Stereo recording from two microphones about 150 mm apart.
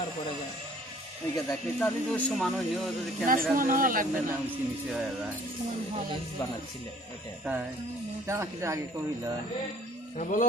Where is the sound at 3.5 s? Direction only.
65° right (ahead or behind).